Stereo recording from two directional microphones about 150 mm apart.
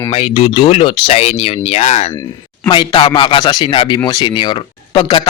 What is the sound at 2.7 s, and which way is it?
Speech, 30° left (ahead or behind).